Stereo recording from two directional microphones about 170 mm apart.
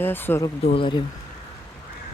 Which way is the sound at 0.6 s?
35° left (ahead or behind).